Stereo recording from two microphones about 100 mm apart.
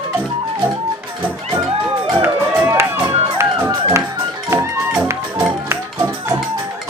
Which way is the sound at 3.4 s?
30° right (ahead or behind).